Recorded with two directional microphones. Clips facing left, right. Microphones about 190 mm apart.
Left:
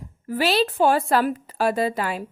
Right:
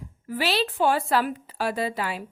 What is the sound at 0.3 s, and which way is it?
A woman's voice, 45° left (ahead or behind).